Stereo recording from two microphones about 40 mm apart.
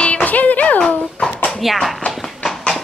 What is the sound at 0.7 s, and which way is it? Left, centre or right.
Dog, left.